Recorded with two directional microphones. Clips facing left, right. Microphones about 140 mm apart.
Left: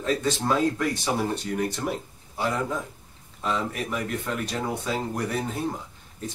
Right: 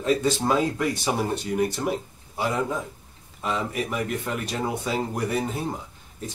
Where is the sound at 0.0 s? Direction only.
10° right (ahead or behind).